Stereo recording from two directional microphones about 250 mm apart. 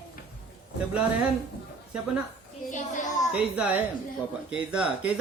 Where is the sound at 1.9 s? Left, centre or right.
Centre.